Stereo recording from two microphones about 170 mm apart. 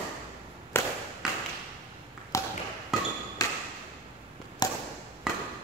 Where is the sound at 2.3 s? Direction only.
15° left (ahead or behind).